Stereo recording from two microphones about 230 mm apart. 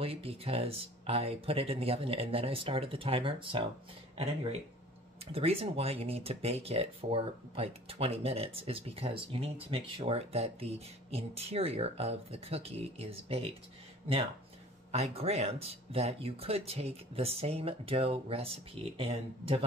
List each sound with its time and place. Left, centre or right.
0.0 s speech: right
14.9 s speech: right